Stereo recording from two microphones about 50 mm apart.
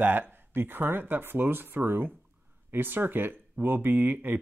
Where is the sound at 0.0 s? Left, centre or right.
Right.